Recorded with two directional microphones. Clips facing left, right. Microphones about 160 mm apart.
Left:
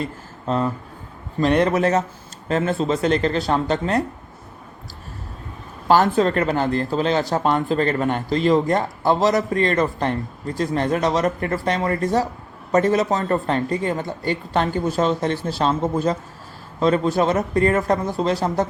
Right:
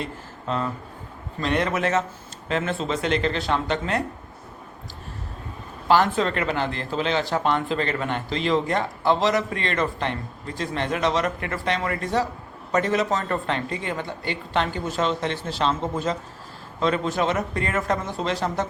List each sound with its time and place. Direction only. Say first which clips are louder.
0.0 s speech: left 4 dB; 40° left (ahead or behind)
5.9 s speech: left 4 dB; 40° left (ahead or behind)